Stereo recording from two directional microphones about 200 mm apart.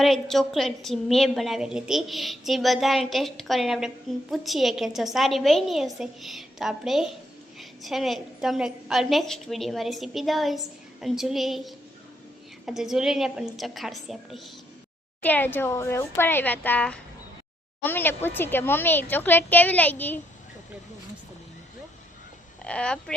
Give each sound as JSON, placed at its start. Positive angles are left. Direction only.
{"t": 0.0, "sound": "a woman's voice", "side_deg": 0}
{"t": 22.6, "sound": "a woman's voice", "side_deg": 5}